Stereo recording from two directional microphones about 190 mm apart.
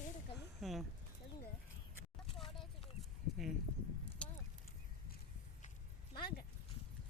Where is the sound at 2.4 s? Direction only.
Centre (ahead or behind).